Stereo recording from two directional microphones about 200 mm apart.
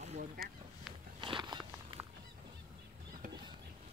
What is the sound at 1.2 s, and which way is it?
Walk, 25° right (ahead or behind).